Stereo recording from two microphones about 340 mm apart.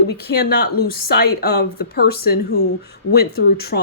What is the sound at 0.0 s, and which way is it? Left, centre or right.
Speech, left.